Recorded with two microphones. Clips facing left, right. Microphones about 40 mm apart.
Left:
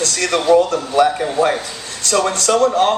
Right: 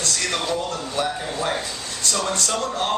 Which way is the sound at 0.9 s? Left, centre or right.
Left.